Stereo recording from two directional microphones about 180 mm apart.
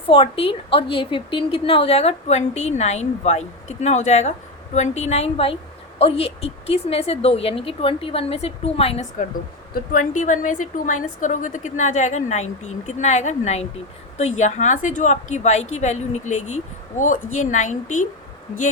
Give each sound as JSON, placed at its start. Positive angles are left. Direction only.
{"t": 0.1, "sound": "a woman's voice", "side_deg": 30}
{"t": 9.7, "sound": "a woman's voice", "side_deg": 45}